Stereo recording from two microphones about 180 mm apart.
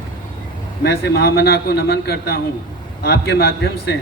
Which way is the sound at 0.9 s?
65° left (ahead or behind).